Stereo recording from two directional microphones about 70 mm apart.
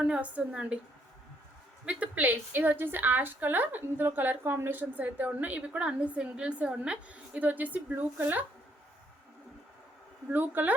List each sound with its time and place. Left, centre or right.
0.0 s a woman's voice: centre
1.8 s a woman's voice: centre
10.3 s a woman's voice: right